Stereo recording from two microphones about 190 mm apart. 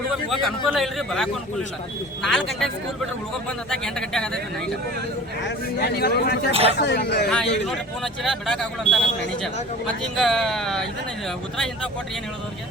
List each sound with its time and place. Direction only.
0.3 s speech: centre (ahead or behind)
3.7 s speech: 5° left (ahead or behind)
5.4 s speech: 65° left (ahead or behind)
6.5 s speech: 30° right (ahead or behind)
6.7 s speech: 60° left (ahead or behind)
8.0 s speech: centre (ahead or behind)